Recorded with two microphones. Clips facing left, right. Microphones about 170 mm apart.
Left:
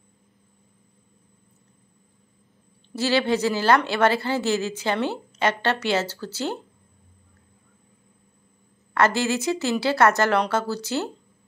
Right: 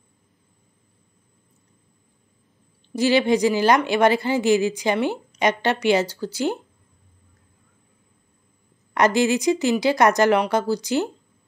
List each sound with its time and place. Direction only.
2.9 s speech: 15° right (ahead or behind)
8.9 s speech: 15° right (ahead or behind)